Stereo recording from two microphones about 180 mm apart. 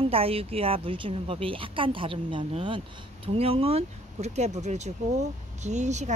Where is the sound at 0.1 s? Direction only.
30° right (ahead or behind).